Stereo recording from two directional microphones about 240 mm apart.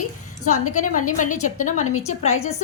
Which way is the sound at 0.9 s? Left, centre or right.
Left.